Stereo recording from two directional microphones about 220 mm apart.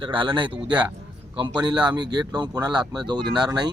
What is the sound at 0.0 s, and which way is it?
Speech, 20° right (ahead or behind).